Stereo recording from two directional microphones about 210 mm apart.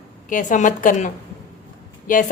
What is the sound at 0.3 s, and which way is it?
A woman's voice, 40° left (ahead or behind).